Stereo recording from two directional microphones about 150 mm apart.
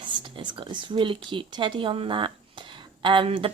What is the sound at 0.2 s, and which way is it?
Speech, 30° right (ahead or behind).